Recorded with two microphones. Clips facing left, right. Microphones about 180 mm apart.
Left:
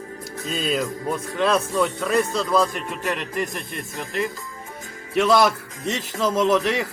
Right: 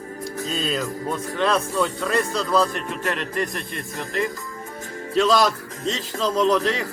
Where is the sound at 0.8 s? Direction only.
5° left (ahead or behind).